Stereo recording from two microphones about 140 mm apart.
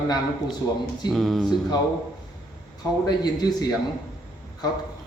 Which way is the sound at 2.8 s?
30° left (ahead or behind).